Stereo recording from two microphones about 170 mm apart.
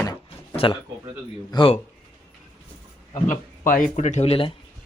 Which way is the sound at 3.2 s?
50° left (ahead or behind).